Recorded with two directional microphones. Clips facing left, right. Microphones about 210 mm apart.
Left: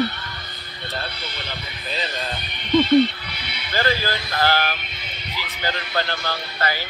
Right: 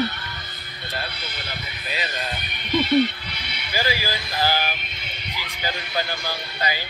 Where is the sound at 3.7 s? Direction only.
10° right (ahead or behind).